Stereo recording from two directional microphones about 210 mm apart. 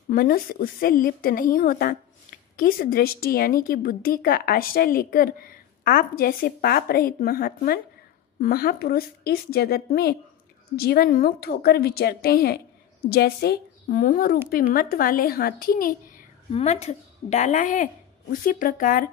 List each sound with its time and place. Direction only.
0.1 s a woman's voice: 45° left (ahead or behind)
16.4 s a woman's voice: 30° left (ahead or behind)